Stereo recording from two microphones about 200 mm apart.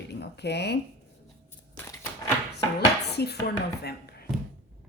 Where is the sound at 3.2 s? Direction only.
55° left (ahead or behind).